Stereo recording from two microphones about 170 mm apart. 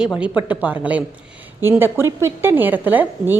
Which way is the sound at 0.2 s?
10° right (ahead or behind).